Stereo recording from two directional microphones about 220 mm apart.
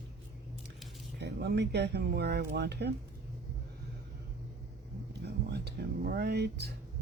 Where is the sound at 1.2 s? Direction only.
50° right (ahead or behind).